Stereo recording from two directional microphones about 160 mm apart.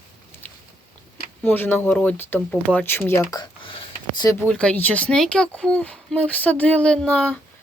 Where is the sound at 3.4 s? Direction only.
30° left (ahead or behind).